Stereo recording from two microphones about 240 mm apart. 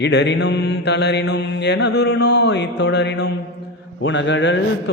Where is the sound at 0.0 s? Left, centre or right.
Left.